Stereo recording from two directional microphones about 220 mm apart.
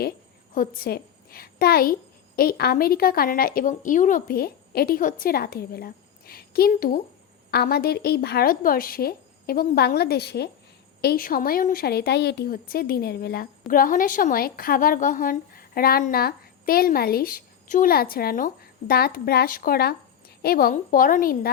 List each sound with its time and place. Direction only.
0.5 s a woman's voice: 40° left (ahead or behind)